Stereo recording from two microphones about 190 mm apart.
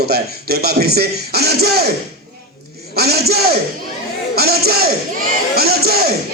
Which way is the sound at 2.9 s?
55° right (ahead or behind).